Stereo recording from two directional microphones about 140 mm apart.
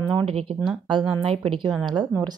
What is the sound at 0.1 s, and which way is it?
A woman's voice, 45° right (ahead or behind).